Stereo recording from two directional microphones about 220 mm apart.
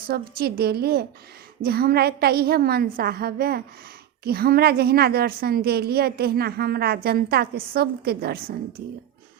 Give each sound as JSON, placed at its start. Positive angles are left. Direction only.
{"t": 0.1, "sound": "a woman's voice", "side_deg": -45}